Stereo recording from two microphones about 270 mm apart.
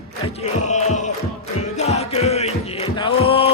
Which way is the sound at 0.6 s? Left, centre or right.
Left.